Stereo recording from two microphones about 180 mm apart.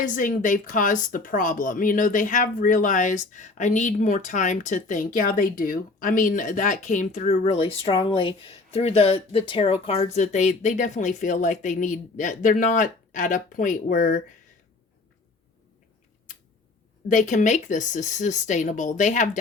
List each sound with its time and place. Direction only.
0.0 s speech: 45° left (ahead or behind)
17.1 s speech: 45° left (ahead or behind)